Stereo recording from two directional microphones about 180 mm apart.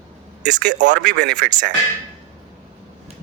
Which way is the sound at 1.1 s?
65° right (ahead or behind).